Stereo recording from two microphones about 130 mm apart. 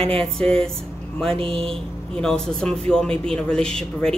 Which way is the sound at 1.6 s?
5° left (ahead or behind).